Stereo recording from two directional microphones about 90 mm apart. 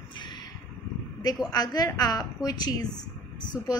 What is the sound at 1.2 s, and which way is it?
A woman's voice, 45° left (ahead or behind).